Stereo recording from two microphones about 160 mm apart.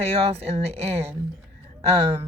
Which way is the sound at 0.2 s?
40° right (ahead or behind).